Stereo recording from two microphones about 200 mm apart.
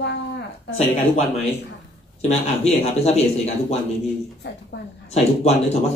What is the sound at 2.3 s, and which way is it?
Speech, 30° left (ahead or behind).